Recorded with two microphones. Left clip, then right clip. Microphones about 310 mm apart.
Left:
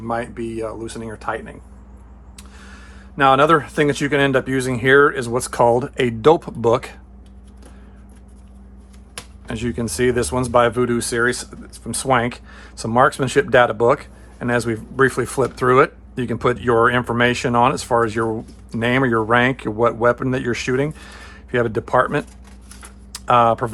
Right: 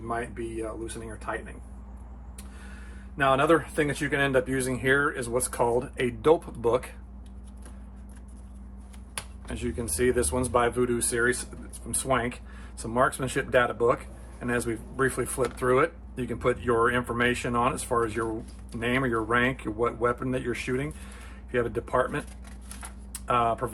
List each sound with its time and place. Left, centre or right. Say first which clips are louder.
0.1 s speech: left 8 dB; centre
3.2 s speech: left 9 dB; left
9.5 s speech: left 9 dB; left